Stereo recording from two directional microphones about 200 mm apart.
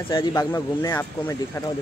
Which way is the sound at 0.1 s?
20° left (ahead or behind).